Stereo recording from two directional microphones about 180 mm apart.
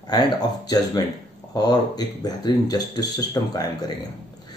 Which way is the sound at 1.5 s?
20° left (ahead or behind).